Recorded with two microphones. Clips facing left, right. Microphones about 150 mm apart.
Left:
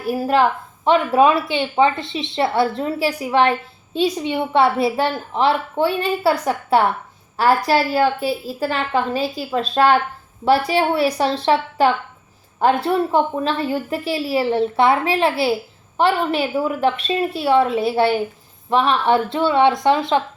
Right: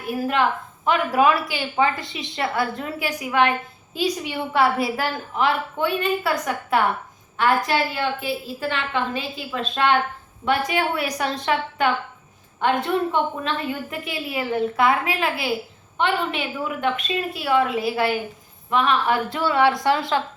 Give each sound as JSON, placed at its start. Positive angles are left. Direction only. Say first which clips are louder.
{"t": 0.0, "sound": "a woman's voice", "louder": "left 5 dB", "side_deg": 35}